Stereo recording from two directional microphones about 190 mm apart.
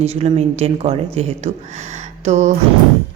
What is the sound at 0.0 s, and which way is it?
A woman's voice, 35° right (ahead or behind).